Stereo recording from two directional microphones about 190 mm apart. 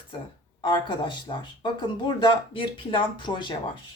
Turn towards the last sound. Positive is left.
turn(degrees=25)  # may be behind; listen again after turning